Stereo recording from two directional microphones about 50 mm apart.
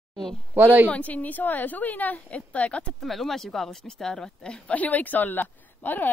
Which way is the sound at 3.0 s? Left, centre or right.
Centre.